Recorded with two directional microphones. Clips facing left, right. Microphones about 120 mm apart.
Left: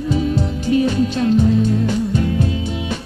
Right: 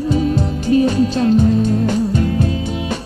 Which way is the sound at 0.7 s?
35° right (ahead or behind).